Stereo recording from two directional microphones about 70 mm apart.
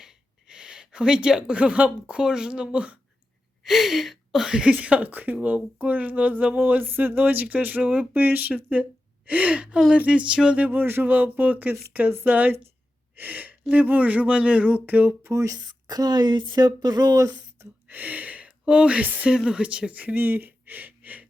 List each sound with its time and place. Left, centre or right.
0.0 s speech: centre
3.6 s a sound: centre
4.7 s a woman's voice: right
9.9 s a sound: centre
10.7 s a woman's voice: right
15.2 s speech: right
15.5 s speech: right
17.8 s speech: right